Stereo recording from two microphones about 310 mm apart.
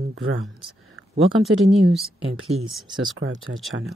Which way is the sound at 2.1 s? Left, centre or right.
Centre.